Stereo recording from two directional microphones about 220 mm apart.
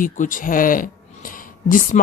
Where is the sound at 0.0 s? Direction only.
35° left (ahead or behind).